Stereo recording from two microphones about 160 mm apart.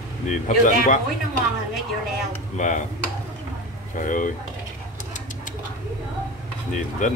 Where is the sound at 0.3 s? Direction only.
50° left (ahead or behind).